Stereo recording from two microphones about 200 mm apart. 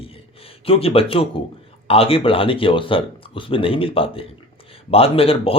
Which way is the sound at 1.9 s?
30° left (ahead or behind).